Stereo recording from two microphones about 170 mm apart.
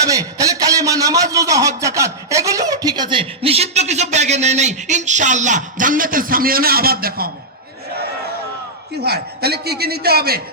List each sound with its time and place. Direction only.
0.1 s a man's voice: 20° right (ahead or behind); by 7.3 s 60° right (ahead or behind)
9.0 s a man's voice: 70° right (ahead or behind)